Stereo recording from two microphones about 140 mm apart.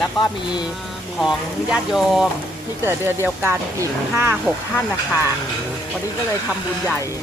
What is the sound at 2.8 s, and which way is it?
Speech, 15° right (ahead or behind).